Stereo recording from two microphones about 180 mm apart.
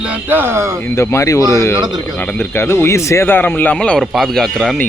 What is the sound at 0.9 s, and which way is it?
Speech, 15° left (ahead or behind).